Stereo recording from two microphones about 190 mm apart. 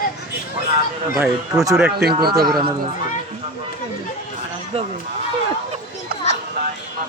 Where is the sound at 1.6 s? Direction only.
15° right (ahead or behind).